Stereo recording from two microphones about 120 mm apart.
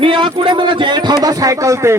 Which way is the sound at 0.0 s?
45° right (ahead or behind).